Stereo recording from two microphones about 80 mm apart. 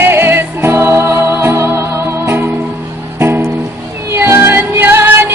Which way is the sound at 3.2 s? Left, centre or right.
Right.